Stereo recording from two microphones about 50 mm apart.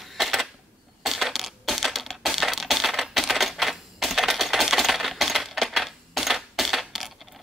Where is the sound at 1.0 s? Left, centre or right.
Centre.